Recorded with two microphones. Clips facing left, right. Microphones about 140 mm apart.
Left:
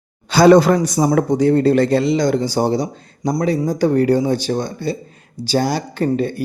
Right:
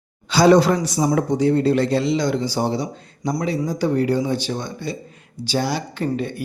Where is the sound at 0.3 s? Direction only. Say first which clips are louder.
Left 4 dB; 50° left (ahead or behind).